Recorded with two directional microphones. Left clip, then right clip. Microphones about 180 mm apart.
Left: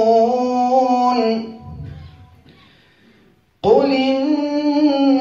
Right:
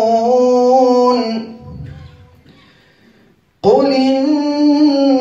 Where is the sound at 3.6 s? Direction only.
45° right (ahead or behind).